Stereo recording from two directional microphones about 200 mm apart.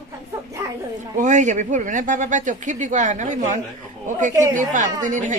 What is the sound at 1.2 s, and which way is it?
Speech, 35° right (ahead or behind).